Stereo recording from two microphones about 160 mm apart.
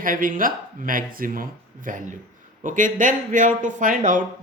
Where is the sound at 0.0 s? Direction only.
60° right (ahead or behind).